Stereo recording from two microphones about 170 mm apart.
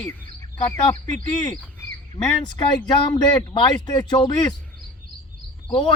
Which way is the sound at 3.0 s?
25° left (ahead or behind).